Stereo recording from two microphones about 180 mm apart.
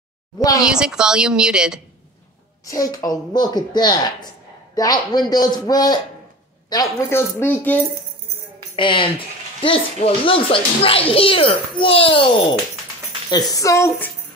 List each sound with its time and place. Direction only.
0.4 s speech: 20° left (ahead or behind)
0.7 s a woman's voice: 5° right (ahead or behind)
2.6 s speech: 20° left (ahead or behind)
8.7 s a child's voice: 30° left (ahead or behind); by 14.1 s 10° left (ahead or behind)